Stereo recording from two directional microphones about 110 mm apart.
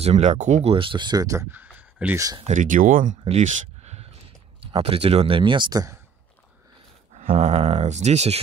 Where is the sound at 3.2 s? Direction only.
85° right.